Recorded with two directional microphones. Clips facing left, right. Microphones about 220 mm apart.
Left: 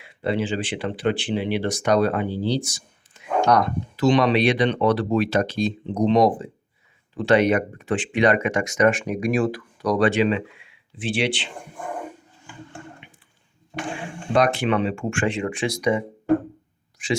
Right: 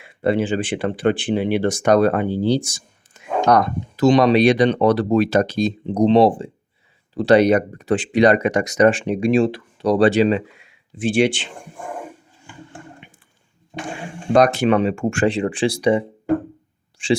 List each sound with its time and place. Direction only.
0.0 s speech: 50° right (ahead or behind)
14.3 s speech: 40° right (ahead or behind)